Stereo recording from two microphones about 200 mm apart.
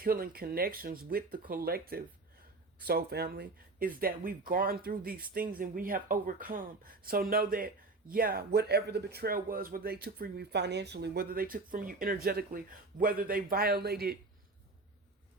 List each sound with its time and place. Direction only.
0.0 s speech: 45° right (ahead or behind)